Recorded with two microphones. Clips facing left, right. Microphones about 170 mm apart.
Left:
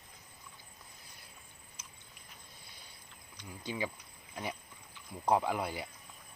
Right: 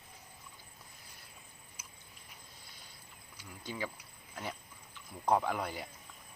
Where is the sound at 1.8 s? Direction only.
10° right (ahead or behind).